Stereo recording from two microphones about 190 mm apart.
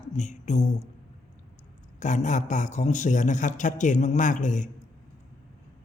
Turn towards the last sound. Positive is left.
turn(degrees=40)  # may be behind; listen again after turning